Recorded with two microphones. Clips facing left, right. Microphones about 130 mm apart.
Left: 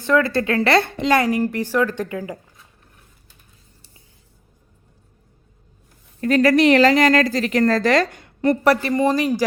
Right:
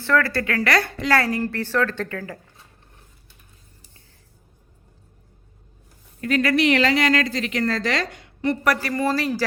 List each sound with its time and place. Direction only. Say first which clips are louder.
0.0 s a woman's voice: left 3 dB; 20° left (ahead or behind)
6.1 s a woman's voice: left 5 dB; 40° left (ahead or behind)
8.6 s a man's voice: left 5 dB; 25° left (ahead or behind)